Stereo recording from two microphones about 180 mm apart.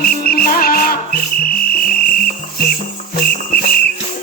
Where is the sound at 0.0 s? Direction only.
55° left (ahead or behind).